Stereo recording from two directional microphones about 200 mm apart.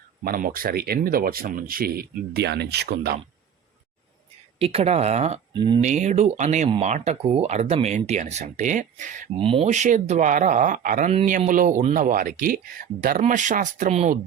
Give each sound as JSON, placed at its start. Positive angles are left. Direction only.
{"t": 0.3, "sound": "speech", "side_deg": -45}
{"t": 4.6, "sound": "speech", "side_deg": -30}
{"t": 5.8, "sound": "speech", "side_deg": -35}
{"t": 9.3, "sound": "speech", "side_deg": -25}